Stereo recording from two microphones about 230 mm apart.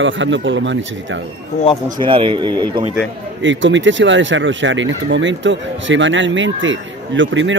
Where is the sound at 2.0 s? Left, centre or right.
Right.